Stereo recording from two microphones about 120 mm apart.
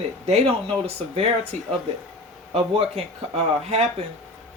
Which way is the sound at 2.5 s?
55° right (ahead or behind).